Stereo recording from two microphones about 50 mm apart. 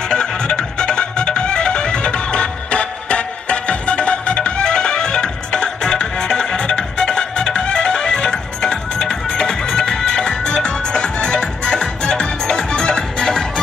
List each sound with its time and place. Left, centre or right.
0.1 s music: centre